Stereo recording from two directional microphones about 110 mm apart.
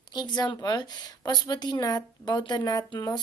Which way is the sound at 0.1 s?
40° left (ahead or behind).